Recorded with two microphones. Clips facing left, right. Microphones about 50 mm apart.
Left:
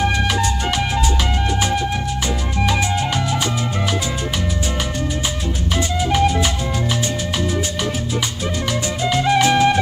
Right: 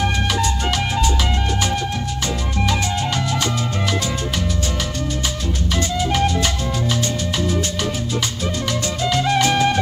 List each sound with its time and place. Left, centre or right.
6.1 s music: centre
9.2 s music: centre